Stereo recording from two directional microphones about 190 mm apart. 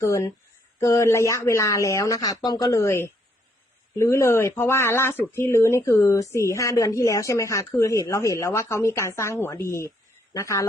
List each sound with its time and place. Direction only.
0.0 s speech: 15° left (ahead or behind)